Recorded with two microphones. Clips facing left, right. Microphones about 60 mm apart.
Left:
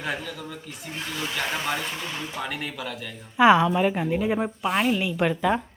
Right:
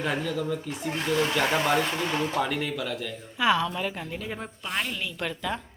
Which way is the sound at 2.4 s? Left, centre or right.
Centre.